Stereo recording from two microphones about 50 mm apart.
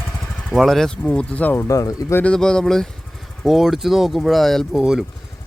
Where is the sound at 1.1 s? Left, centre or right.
Left.